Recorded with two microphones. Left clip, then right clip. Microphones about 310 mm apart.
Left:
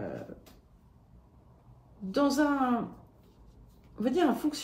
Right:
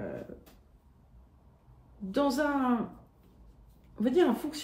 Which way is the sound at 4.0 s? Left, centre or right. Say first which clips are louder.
Right 1 dB; centre.